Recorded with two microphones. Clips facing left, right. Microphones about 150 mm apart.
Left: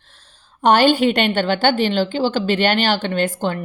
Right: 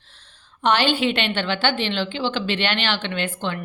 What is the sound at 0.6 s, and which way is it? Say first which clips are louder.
A woman's voice: left 6 dB; 45° left (ahead or behind).